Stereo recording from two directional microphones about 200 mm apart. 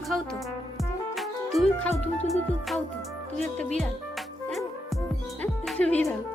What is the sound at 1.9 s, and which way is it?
Speech, 30° left (ahead or behind).